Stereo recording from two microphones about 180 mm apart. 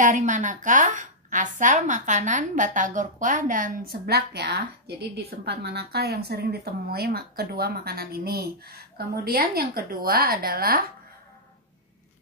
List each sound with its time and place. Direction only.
0.0 s a woman's voice: 45° right (ahead or behind)